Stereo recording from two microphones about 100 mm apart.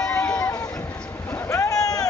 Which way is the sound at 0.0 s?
10° left (ahead or behind).